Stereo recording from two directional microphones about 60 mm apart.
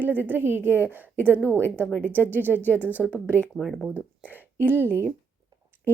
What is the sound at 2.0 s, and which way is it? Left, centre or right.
A woman's voice, left.